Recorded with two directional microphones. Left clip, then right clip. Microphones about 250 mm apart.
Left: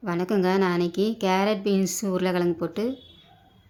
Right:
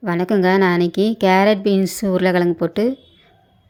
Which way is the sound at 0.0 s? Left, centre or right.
Centre.